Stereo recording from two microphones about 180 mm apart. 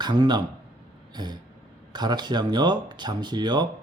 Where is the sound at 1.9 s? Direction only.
25° right (ahead or behind).